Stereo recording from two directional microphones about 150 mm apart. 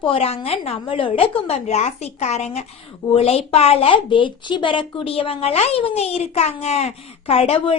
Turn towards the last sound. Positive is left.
turn(degrees=40)  # may be behind; listen again after turning